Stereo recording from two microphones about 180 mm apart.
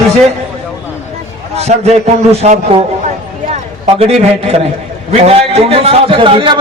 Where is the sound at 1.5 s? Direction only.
35° right (ahead or behind).